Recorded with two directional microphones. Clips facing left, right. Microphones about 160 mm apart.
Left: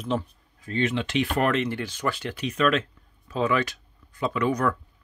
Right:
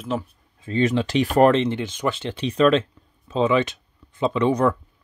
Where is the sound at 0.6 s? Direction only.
35° right (ahead or behind).